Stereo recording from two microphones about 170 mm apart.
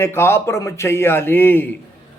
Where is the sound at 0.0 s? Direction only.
15° left (ahead or behind).